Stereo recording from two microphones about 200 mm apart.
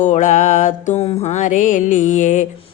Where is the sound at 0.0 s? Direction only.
40° left (ahead or behind).